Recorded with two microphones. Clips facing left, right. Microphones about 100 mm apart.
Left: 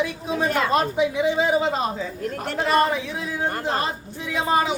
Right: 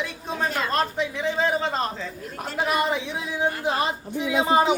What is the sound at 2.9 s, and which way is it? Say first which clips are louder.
Speech: left 1 dB; 20° right (ahead or behind).